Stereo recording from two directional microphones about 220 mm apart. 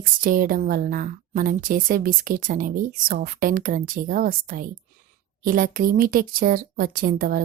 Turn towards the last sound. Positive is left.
turn(degrees=-40)  # may be behind; listen again after turning